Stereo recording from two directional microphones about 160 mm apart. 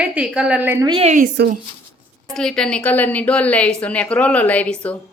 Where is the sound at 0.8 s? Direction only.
35° right (ahead or behind).